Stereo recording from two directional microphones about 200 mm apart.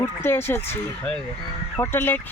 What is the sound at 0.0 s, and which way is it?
Speech, 10° left (ahead or behind).